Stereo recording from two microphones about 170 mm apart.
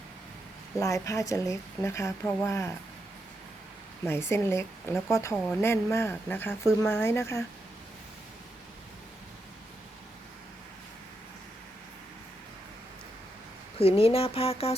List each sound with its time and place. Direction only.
0.8 s speech: 20° left (ahead or behind)
4.0 s speech: 15° left (ahead or behind)
13.7 s speech: 35° left (ahead or behind)